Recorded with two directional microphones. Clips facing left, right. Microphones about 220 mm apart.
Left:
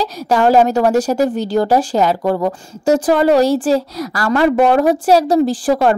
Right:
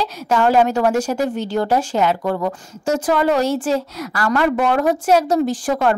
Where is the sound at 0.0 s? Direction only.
40° left (ahead or behind).